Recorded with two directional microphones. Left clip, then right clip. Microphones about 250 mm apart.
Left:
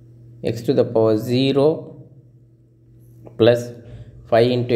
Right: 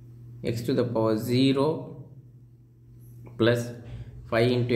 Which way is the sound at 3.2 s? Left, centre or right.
Centre.